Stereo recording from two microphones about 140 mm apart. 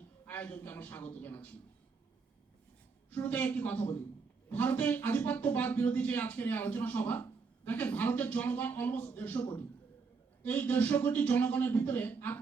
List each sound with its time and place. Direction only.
0.3 s a man's voice: 10° left (ahead or behind)
3.1 s speech: 10° left (ahead or behind)